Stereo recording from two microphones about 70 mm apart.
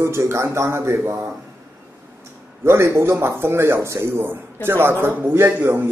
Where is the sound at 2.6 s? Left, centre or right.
Right.